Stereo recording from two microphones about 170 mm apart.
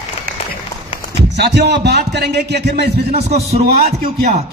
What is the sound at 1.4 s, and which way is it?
A man's voice, 80° right.